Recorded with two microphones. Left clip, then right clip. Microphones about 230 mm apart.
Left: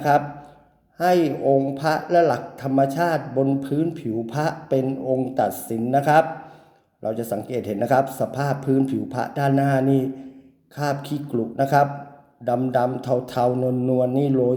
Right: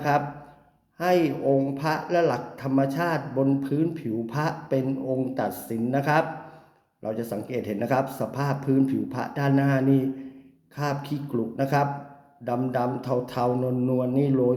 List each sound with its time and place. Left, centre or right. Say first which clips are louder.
0.9 s a man's voice: left 4 dB; centre